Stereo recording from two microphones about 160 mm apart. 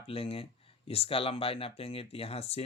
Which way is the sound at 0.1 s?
35° left (ahead or behind).